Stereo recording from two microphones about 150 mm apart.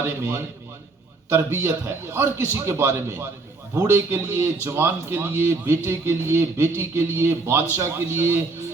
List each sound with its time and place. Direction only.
0.0 s a man's voice: 15° right (ahead or behind)